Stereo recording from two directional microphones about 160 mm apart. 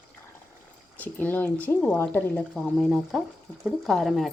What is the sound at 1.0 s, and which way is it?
Speech, 10° left (ahead or behind).